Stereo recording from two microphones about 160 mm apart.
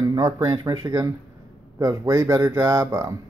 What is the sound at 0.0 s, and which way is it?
A man's voice, 20° right (ahead or behind).